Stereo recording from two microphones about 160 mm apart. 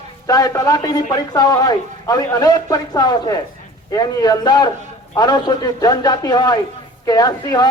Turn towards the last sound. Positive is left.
turn(degrees=25)  # may be behind; listen again after turning